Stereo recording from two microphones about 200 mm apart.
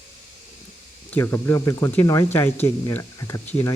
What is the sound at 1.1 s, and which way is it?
Speech, 15° left (ahead or behind).